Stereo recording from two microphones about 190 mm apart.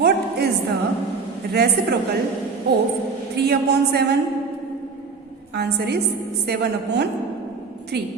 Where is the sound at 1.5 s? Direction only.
60° right (ahead or behind).